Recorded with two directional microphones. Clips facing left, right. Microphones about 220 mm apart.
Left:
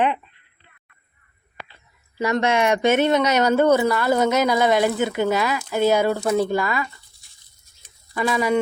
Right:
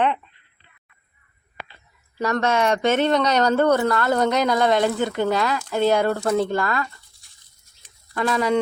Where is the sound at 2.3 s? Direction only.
10° left (ahead or behind).